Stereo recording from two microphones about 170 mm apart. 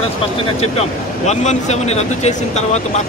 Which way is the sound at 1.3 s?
40° left (ahead or behind).